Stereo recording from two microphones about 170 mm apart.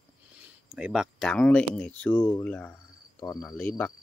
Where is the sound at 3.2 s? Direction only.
20° left (ahead or behind).